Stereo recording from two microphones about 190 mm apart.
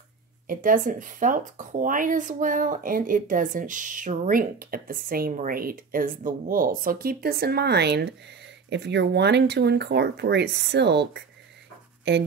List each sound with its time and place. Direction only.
0.5 s speech: 45° right (ahead or behind); by 12.2 s 65° right (ahead or behind)